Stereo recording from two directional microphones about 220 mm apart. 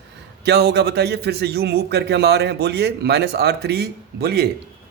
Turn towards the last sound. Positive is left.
turn(degrees=-45)  # may be behind; listen again after turning